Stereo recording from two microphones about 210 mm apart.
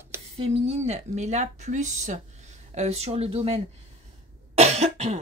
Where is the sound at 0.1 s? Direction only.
10° right (ahead or behind).